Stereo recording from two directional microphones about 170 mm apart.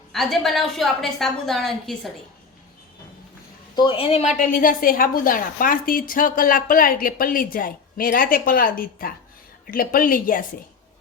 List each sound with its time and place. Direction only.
0.1 s a woman's voice: centre (ahead or behind)
3.8 s a woman's voice: 30° left (ahead or behind); by 10.4 s 55° left (ahead or behind)